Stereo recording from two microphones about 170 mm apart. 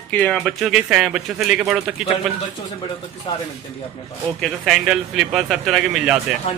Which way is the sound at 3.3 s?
25° left (ahead or behind).